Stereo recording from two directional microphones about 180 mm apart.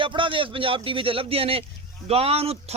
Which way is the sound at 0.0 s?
30° right (ahead or behind).